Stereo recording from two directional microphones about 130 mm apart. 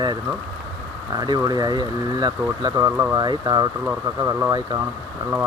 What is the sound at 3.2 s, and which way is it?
Speech, 30° right (ahead or behind).